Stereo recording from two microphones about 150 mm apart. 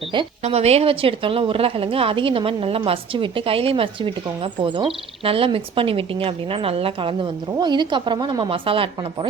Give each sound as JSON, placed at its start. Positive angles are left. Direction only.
{"t": 0.4, "sound": "a woman's voice", "side_deg": -45}
{"t": 5.2, "sound": "a woman's voice", "side_deg": -40}